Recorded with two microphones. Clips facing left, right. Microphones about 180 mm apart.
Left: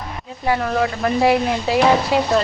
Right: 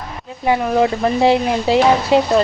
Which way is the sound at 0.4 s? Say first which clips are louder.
Right 4 dB; 20° right (ahead or behind).